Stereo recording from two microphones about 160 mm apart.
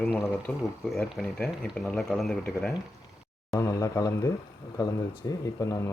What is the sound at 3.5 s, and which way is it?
Speech, 20° left (ahead or behind).